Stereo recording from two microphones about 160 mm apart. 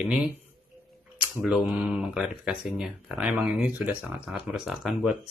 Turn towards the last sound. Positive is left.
turn(degrees=0)  # may be behind; listen again after turning